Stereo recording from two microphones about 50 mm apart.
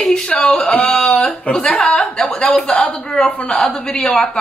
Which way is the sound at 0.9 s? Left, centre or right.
Centre.